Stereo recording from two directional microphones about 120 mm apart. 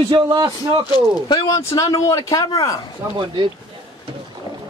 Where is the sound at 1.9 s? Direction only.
25° left (ahead or behind).